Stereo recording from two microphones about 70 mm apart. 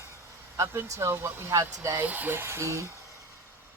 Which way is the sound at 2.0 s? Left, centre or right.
Right.